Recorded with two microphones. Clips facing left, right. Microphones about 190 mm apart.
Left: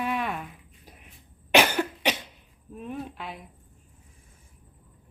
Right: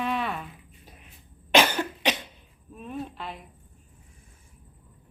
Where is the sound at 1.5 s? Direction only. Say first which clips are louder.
Even; 15° left (ahead or behind).